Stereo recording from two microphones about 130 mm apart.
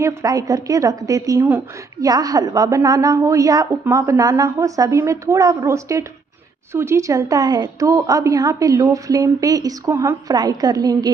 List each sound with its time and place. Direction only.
0.0 s a woman's voice: 25° right (ahead or behind)